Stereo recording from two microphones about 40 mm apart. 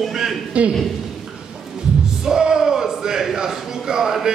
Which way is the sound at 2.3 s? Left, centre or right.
Centre.